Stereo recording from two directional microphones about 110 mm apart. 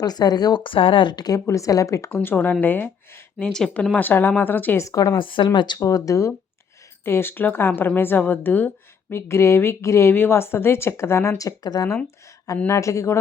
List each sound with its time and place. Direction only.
0.0 s a woman's voice: 35° left (ahead or behind)
2.0 s speech: 20° left (ahead or behind)
3.9 s speech: 15° left (ahead or behind)
4.8 s a woman's voice: 30° left (ahead or behind)
5.1 s a woman's voice: 50° left (ahead or behind); by 13.1 s 30° left (ahead or behind)